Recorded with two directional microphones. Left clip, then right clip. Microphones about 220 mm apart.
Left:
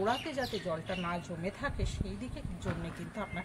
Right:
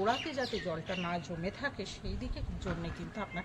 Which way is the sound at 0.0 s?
Centre (ahead or behind).